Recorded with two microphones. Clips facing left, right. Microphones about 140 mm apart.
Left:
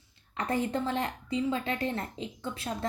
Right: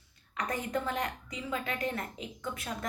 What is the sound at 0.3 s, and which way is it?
A woman's voice, 30° left (ahead or behind).